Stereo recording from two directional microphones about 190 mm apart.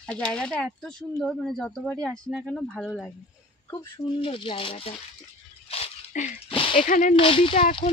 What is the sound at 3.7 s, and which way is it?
Speech, 25° left (ahead or behind).